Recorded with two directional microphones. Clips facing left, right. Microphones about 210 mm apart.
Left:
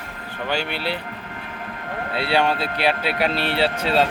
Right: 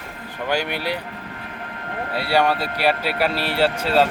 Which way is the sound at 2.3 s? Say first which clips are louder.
Right 2 dB; 10° right (ahead or behind).